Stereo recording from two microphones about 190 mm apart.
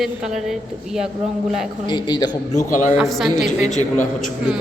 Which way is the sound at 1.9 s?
25° left (ahead or behind).